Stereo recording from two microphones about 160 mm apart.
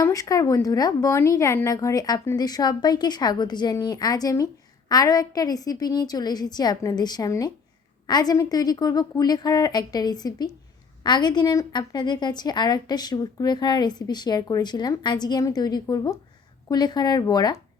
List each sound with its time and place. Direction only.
0.0 s a woman's voice: 20° left (ahead or behind)